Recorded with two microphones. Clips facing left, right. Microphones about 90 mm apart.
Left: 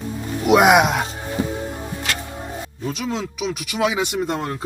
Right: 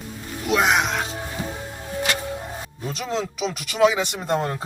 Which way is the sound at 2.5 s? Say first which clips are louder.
Left 4 dB; centre (ahead or behind).